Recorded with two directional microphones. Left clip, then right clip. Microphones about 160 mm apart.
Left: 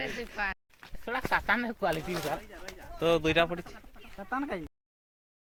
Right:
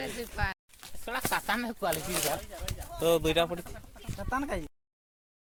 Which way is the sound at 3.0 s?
10° right (ahead or behind).